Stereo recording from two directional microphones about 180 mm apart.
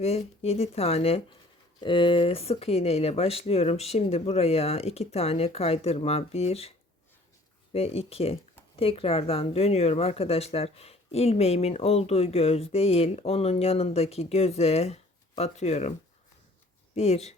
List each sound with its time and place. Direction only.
0.0 s speech: 35° left (ahead or behind)
16.9 s speech: 35° left (ahead or behind)